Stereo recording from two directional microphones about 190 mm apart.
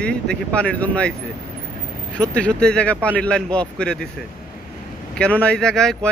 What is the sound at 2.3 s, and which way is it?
A man's voice, 5° left (ahead or behind).